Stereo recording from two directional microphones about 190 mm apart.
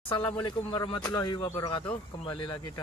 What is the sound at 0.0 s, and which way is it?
Speech, 25° left (ahead or behind).